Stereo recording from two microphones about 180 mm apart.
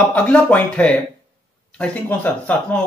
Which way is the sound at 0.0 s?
10° left (ahead or behind).